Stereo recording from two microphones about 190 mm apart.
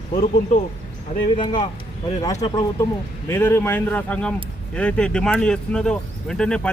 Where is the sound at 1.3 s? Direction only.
25° left (ahead or behind).